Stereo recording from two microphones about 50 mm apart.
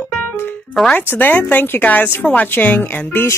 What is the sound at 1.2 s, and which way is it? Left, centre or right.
Speech, left.